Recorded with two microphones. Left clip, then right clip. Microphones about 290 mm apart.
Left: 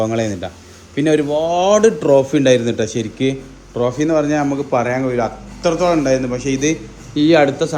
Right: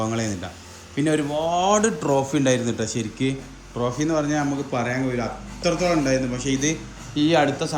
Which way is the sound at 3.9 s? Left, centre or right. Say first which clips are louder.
Left 6 dB; centre.